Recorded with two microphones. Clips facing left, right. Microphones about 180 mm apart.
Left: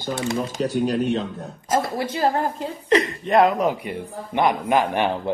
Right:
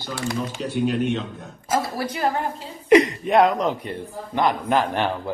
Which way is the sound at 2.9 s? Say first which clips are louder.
Right 5 dB; 15° right (ahead or behind).